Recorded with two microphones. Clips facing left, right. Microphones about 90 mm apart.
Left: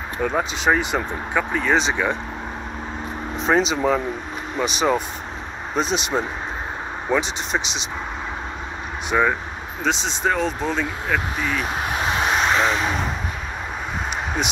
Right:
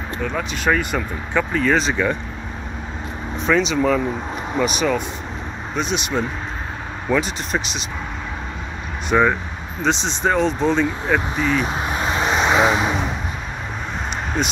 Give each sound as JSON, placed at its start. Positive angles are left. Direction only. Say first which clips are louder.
{"t": 0.2, "sound": "speech", "louder": "left 4 dB", "side_deg": 30}
{"t": 0.6, "sound": "speech", "louder": "right 2 dB", "side_deg": 20}
{"t": 3.4, "sound": "speech", "louder": "right 1 dB", "side_deg": 30}
{"t": 7.1, "sound": "speech", "louder": "right 2 dB", "side_deg": 20}
{"t": 7.6, "sound": "speech", "louder": "even", "side_deg": 90}
{"t": 9.1, "sound": "speech", "louder": "right 3 dB", "side_deg": 5}